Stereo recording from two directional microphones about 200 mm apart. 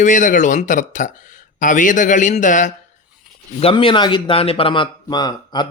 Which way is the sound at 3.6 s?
25° left (ahead or behind).